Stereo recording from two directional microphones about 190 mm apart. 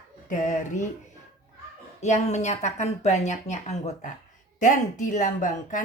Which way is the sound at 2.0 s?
35° left (ahead or behind).